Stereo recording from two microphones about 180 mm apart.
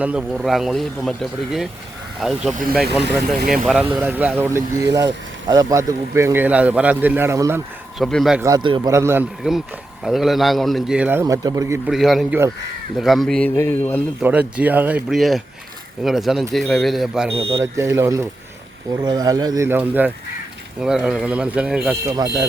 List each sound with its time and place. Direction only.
0.0 s a man's voice: 5° right (ahead or behind)
4.0 s speech: 10° right (ahead or behind)
7.9 s a man's voice: centre (ahead or behind)
8.4 s a man's voice: 20° right (ahead or behind)
8.9 s a man's voice: 15° right (ahead or behind)
11.9 s a man's voice: centre (ahead or behind)
14.2 s a man's voice: 5° right (ahead or behind)
17.6 s a man's voice: 15° right (ahead or behind)
22.0 s a man's voice: 20° right (ahead or behind)